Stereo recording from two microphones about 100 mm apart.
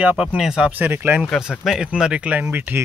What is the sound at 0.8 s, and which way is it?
Speech, 20° right (ahead or behind).